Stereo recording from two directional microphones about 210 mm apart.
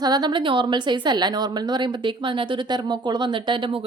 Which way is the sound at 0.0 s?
20° right (ahead or behind).